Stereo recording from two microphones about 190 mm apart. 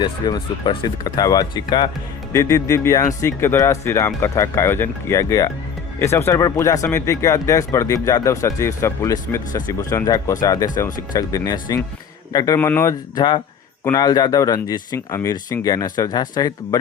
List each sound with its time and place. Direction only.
0.0 s speech: 25° left (ahead or behind)